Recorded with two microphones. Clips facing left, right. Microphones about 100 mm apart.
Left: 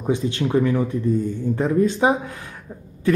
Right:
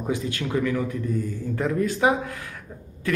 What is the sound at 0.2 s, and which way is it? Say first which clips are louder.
Speech: left 5 dB; 25° left (ahead or behind).